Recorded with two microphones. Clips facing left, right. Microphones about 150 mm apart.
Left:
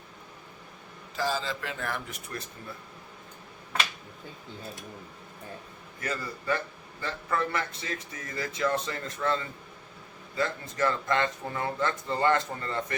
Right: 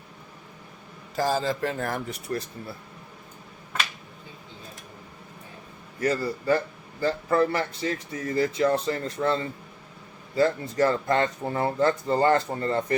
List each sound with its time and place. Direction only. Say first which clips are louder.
1.1 s speech: right 5 dB; 45° right (ahead or behind)
6.0 s speech: right 9 dB; 35° right (ahead or behind)